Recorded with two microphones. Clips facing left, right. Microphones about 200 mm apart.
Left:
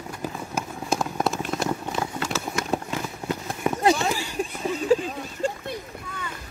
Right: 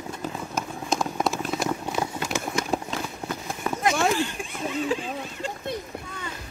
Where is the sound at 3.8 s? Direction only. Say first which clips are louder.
Even; 35° left (ahead or behind).